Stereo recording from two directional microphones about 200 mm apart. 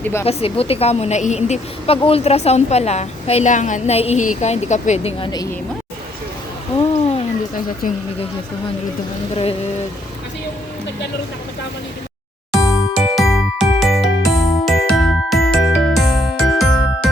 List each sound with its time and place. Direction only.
0.0 s speech: 15° left (ahead or behind)
0.3 s a woman's voice: 30° left (ahead or behind)
6.9 s speech: 35° left (ahead or behind)
9.3 s a sound: 30° left (ahead or behind)
12.5 s music: 15° left (ahead or behind)
13.1 s music: centre (ahead or behind)